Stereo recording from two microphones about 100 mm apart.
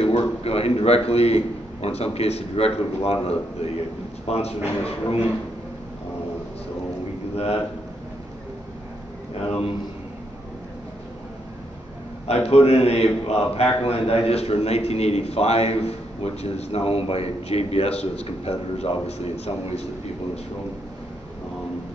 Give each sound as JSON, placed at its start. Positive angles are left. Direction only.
{"t": 0.0, "sound": "a man's voice", "side_deg": 80}
{"t": 4.8, "sound": "a man's voice", "side_deg": 75}
{"t": 12.3, "sound": "a man's voice", "side_deg": 90}